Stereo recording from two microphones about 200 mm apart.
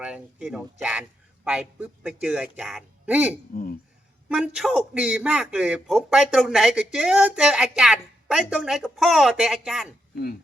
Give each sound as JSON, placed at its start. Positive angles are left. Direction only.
{"t": 0.0, "sound": "a man's voice", "side_deg": -5}
{"t": 3.5, "sound": "speech", "side_deg": 45}
{"t": 4.3, "sound": "a man's voice", "side_deg": -5}